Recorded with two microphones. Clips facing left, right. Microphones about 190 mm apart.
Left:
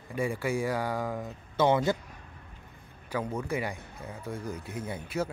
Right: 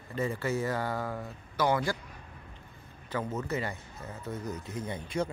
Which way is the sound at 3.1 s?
10° left (ahead or behind).